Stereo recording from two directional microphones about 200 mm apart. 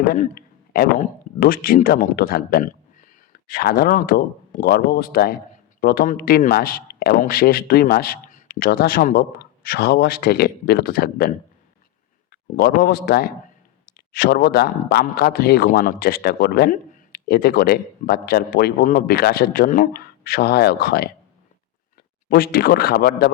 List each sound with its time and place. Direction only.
0.1 s speech: 45° left (ahead or behind)
22.3 s speech: 50° left (ahead or behind)